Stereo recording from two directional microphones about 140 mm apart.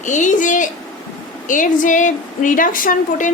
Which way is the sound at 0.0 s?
60° left (ahead or behind).